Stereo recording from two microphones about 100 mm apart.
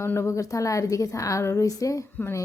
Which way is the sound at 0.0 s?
25° left (ahead or behind).